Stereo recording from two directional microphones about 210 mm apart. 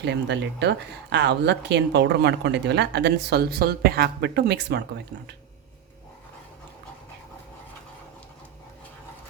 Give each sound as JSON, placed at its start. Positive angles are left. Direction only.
{"t": 0.0, "sound": "a woman's voice", "side_deg": -55}